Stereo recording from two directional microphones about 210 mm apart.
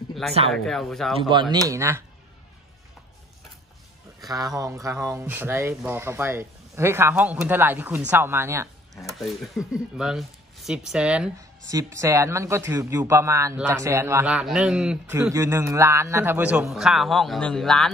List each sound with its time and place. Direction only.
0.5 s a man's voice: centre (ahead or behind)
1.3 s speech: 20° right (ahead or behind)
4.3 s speech: 15° right (ahead or behind)
8.9 s a man's voice: centre (ahead or behind)
11.3 s a man's voice: 15° right (ahead or behind); by 17.9 s centre (ahead or behind)